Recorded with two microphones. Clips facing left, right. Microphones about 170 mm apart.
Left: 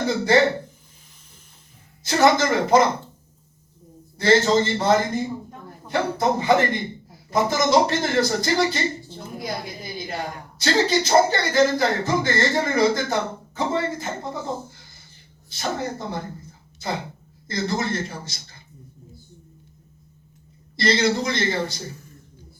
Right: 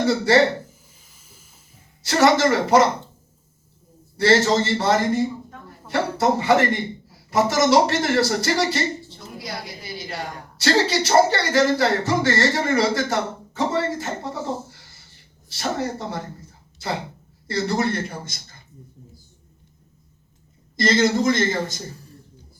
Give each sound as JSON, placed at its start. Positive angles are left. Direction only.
{"t": 0.0, "sound": "speech", "side_deg": -75}
{"t": 2.0, "sound": "speech", "side_deg": -75}
{"t": 4.2, "sound": "a man's voice", "side_deg": -80}
{"t": 9.6, "sound": "a sound", "side_deg": -80}
{"t": 10.6, "sound": "speech", "side_deg": -75}
{"t": 17.5, "sound": "a man's voice", "side_deg": -65}
{"t": 20.7, "sound": "a man's voice", "side_deg": -45}